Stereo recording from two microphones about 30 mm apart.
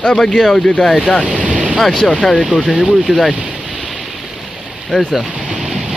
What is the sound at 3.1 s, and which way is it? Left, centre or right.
Speech, right.